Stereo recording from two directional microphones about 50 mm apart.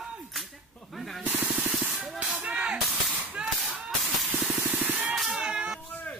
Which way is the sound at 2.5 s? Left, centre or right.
Centre.